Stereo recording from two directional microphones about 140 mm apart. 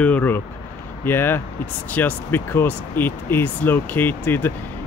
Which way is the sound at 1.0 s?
15° left (ahead or behind).